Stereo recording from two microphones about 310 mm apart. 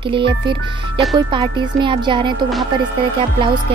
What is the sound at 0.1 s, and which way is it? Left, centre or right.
Speech, centre.